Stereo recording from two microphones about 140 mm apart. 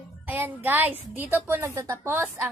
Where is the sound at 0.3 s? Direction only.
10° right (ahead or behind).